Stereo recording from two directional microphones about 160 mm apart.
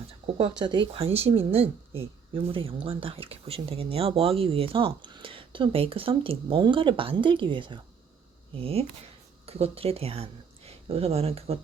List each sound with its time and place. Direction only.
0.3 s speech: 35° right (ahead or behind)